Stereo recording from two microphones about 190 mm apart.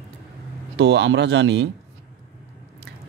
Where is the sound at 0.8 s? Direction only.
60° right (ahead or behind).